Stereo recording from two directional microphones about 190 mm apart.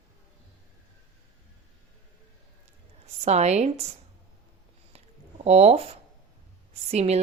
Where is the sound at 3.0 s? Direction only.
35° right (ahead or behind).